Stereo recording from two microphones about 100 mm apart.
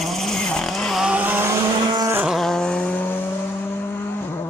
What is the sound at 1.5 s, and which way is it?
Vehicle, 30° right (ahead or behind).